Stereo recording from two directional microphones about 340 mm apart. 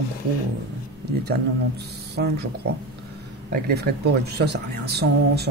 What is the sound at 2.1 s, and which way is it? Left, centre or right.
Speech, right.